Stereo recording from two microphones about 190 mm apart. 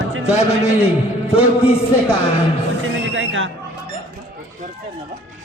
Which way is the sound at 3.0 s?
90° right.